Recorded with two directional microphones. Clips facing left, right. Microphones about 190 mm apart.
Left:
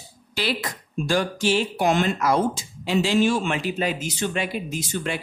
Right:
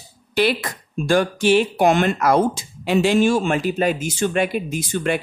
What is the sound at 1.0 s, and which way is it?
Speech, 55° right (ahead or behind).